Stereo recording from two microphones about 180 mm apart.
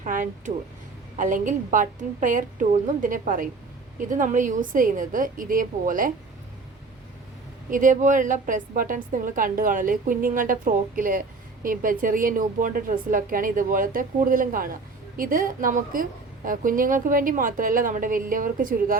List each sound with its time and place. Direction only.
0.0 s a woman's voice: 45° right (ahead or behind)
7.7 s a woman's voice: 45° right (ahead or behind)